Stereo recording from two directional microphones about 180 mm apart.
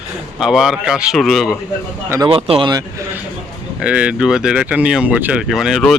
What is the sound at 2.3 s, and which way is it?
Speech, 30° right (ahead or behind).